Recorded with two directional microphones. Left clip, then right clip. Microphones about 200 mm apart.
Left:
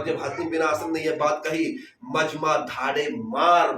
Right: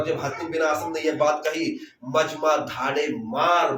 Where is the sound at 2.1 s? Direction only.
20° left (ahead or behind).